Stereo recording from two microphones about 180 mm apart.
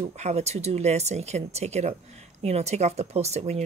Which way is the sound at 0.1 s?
40° right (ahead or behind).